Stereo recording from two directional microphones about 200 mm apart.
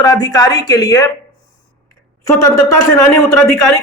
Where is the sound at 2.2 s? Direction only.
15° left (ahead or behind).